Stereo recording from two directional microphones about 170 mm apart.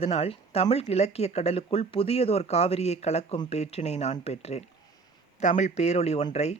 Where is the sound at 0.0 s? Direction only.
35° left (ahead or behind).